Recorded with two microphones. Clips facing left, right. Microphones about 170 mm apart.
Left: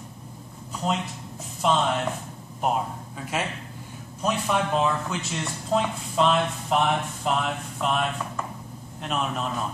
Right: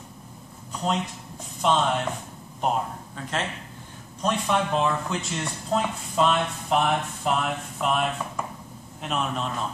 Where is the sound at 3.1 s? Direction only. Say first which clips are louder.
Left 1 dB; 10° left (ahead or behind).